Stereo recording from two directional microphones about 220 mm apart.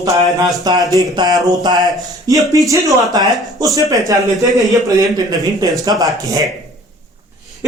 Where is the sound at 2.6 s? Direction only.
15° right (ahead or behind).